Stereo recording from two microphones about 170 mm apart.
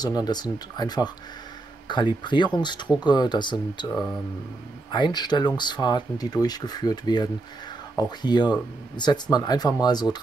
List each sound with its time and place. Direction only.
0.0 s speech: 25° left (ahead or behind)